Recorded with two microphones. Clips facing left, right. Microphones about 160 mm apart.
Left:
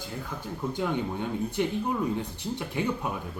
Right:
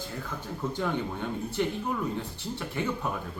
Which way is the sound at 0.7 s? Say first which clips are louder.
Left 2 dB; 15° left (ahead or behind).